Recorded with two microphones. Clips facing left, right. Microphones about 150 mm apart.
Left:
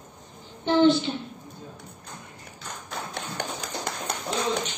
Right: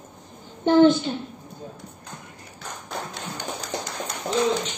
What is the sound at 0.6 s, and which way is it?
Child singing, 45° right (ahead or behind).